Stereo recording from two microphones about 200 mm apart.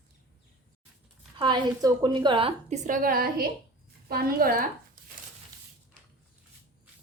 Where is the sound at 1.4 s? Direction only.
20° right (ahead or behind); by 4.6 s 45° right (ahead or behind).